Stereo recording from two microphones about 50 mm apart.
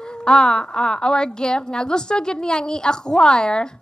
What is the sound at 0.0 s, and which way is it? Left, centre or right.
A woman's voice, centre.